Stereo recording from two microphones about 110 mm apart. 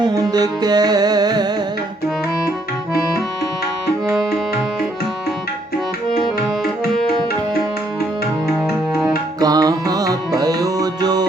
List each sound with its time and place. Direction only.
0.0 s music: 35° right (ahead or behind)
4.1 s music: 5° left (ahead or behind)
6.9 s tabla: 5° left (ahead or behind)
9.4 s music: 35° right (ahead or behind)